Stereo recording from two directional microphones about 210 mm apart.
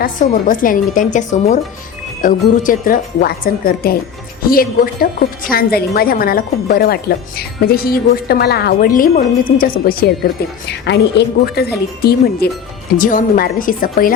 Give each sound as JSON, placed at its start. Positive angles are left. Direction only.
{"t": 0.0, "sound": "a woman's voice", "side_deg": 40}
{"t": 10.7, "sound": "a woman's voice", "side_deg": 55}